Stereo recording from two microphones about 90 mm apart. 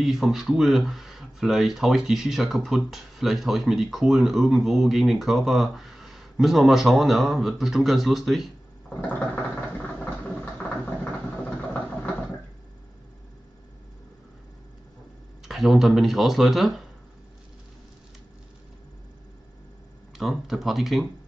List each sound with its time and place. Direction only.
0.0 s speech: 5° right (ahead or behind)
9.0 s a sound: 15° left (ahead or behind)
11.4 s vehicle: 15° left (ahead or behind)
15.4 s speech: centre (ahead or behind)
20.2 s speech: 5° right (ahead or behind)